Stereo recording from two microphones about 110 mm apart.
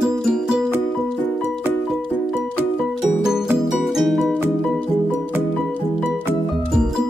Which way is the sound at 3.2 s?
5° right (ahead or behind).